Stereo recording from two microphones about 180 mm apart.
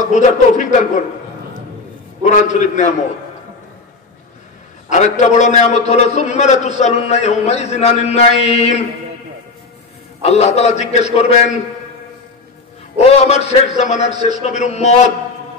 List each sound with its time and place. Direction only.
0.0 s a man's voice: 45° left (ahead or behind)
2.2 s a man's voice: 40° left (ahead or behind)
4.8 s a man's voice: 40° left (ahead or behind)
10.2 s a man's voice: 35° left (ahead or behind)
12.9 s a man's voice: 35° left (ahead or behind)